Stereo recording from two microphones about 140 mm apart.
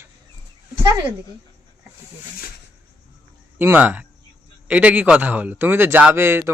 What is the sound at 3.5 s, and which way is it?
A man's voice, 15° right (ahead or behind).